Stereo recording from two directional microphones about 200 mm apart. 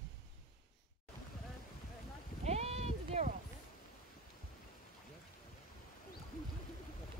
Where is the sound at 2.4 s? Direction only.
30° right (ahead or behind).